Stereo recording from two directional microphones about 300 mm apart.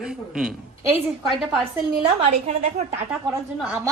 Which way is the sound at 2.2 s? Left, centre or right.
Right.